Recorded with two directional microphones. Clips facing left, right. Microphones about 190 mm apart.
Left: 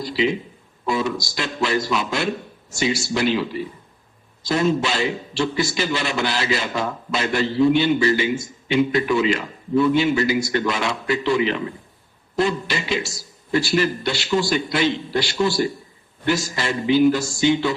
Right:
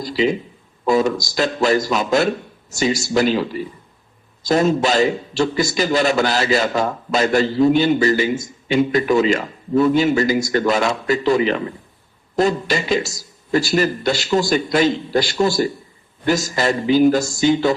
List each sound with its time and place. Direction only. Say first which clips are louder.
0.0 s a man's voice: right 3 dB; 40° right (ahead or behind)